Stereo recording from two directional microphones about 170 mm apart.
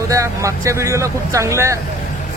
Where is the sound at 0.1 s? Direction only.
20° right (ahead or behind).